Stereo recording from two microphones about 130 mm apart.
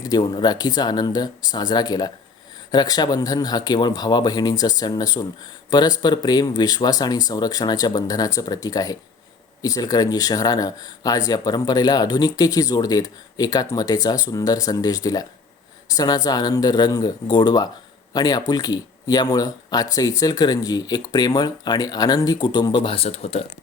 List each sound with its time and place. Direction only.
0.0 s speech: 35° left (ahead or behind); by 23.4 s 55° left (ahead or behind)